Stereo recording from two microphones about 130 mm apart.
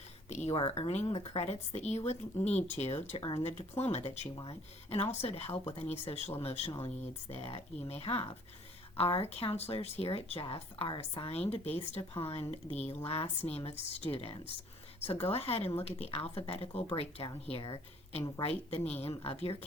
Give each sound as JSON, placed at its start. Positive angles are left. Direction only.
{"t": 0.3, "sound": "a woman's voice", "side_deg": 60}